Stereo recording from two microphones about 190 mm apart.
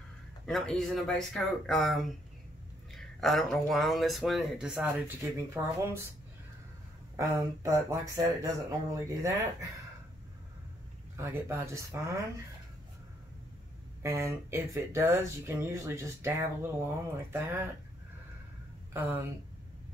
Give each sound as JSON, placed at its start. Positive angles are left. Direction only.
{"t": 0.5, "sound": "speech", "side_deg": 0}
{"t": 7.2, "sound": "speech", "side_deg": -15}
{"t": 11.1, "sound": "speech", "side_deg": -15}
{"t": 14.0, "sound": "speech", "side_deg": -15}